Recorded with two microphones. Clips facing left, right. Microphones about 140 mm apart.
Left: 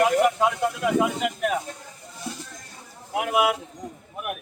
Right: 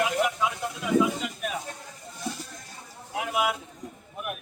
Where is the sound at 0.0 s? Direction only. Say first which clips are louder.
Left 6 dB; 50° left (ahead or behind).